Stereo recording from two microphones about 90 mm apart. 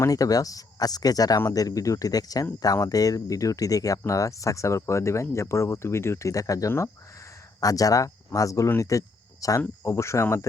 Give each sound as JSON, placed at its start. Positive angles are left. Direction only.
{"t": 0.0, "sound": "speech", "side_deg": 40}
{"t": 8.8, "sound": "cricket", "side_deg": 40}
{"t": 9.6, "sound": "speech", "side_deg": 30}